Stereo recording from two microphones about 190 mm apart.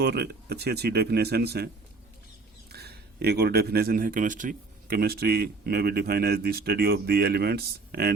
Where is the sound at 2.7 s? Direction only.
60° right (ahead or behind).